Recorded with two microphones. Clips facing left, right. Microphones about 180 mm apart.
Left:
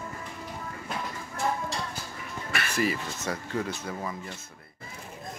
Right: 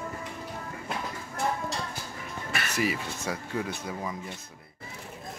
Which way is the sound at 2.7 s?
10° right (ahead or behind).